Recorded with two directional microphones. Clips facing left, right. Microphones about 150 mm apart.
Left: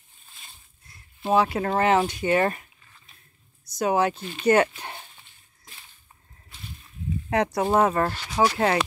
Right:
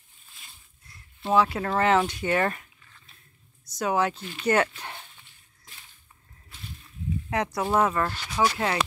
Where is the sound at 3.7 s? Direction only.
25° left (ahead or behind).